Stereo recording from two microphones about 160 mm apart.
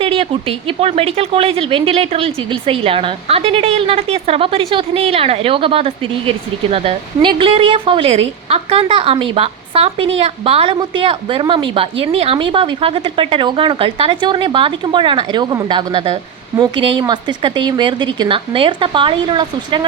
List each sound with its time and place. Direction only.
0.0 s a woman's voice: 35° right (ahead or behind)